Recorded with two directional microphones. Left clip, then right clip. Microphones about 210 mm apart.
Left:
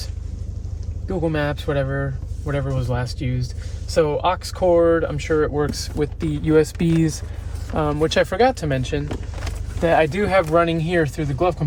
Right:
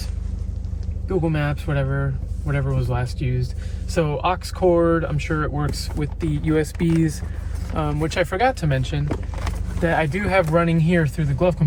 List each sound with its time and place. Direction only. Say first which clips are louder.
1.2 s speech: left 3 dB; 50° left (ahead or behind)
9.8 s speech: left 4 dB; 40° left (ahead or behind)